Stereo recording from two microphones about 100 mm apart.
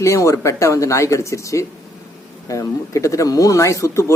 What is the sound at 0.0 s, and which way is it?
Speech, 30° left (ahead or behind).